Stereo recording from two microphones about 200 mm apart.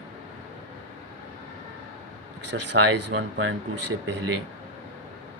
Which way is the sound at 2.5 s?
60° right (ahead or behind).